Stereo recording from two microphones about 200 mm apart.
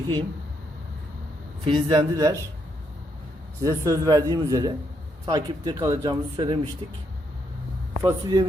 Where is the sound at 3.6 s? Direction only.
15° right (ahead or behind).